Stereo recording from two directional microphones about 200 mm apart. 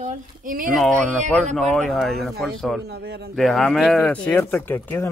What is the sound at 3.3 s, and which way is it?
Speech, centre (ahead or behind).